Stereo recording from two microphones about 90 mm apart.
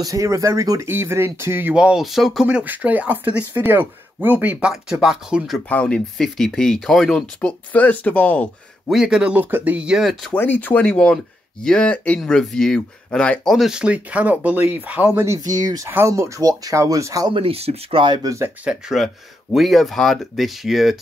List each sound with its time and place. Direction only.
0.0 s speech: 40° right (ahead or behind)
1.8 s speech: 5° right (ahead or behind)
2.4 s speech: 15° right (ahead or behind)
5.7 s speech: 15° left (ahead or behind)
8.8 s speech: 5° right (ahead or behind)
10.3 s speech: 20° left (ahead or behind)
13.5 s speech: 5° right (ahead or behind)
15.2 s speech: 40° right (ahead or behind)
17.3 s speech: 85° right; by 18.3 s 60° right (ahead or behind)
18.6 s speech: 5° right (ahead or behind)